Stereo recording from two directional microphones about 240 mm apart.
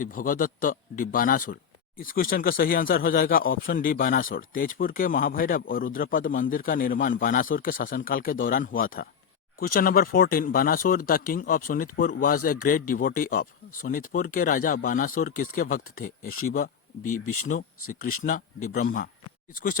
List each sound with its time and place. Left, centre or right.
0.0 s speech: left
16.2 s speech: left
18.2 s speech: left